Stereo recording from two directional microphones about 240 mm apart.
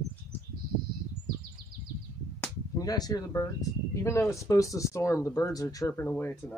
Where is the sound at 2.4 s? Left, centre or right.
Centre.